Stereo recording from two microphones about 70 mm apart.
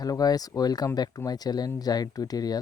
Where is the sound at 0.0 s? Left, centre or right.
Left.